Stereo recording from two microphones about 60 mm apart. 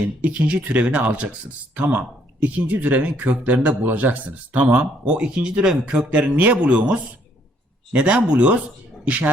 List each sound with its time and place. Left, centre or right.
0.2 s speech: right